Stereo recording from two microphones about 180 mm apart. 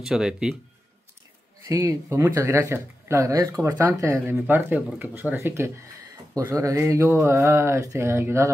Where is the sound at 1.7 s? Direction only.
15° right (ahead or behind).